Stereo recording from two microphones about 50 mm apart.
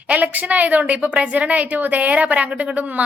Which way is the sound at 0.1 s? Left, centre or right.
Right.